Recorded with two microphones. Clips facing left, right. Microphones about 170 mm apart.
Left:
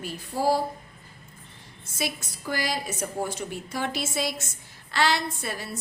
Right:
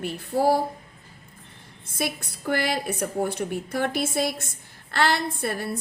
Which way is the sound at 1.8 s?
55° right (ahead or behind).